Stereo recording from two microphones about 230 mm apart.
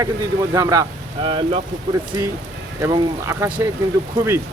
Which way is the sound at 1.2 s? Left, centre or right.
Right.